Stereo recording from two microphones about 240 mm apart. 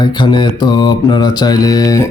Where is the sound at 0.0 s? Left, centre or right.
Centre.